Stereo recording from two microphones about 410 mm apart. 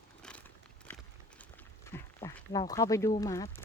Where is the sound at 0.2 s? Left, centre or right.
Centre.